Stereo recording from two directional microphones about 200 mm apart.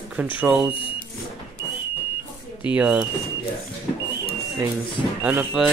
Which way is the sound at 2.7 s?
5° right (ahead or behind).